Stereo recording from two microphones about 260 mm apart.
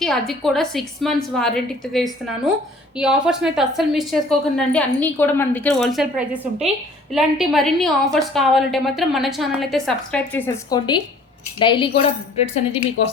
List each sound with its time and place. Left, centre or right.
0.0 s a woman's voice: centre; by 12.9 s left